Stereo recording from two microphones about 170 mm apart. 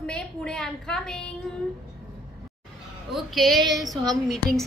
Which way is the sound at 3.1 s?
Centre (ahead or behind).